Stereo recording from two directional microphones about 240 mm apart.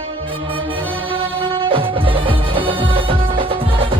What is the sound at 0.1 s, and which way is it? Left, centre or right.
Music, right.